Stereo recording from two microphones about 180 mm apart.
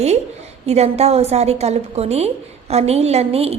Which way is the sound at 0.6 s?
35° right (ahead or behind).